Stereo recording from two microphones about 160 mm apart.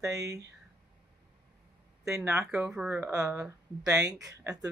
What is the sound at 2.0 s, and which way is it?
Speech, 20° right (ahead or behind).